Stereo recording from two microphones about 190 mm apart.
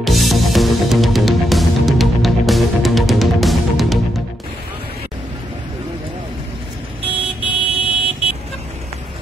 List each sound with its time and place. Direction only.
0.0 s music: centre (ahead or behind)
7.4 s vehicle: 25° left (ahead or behind)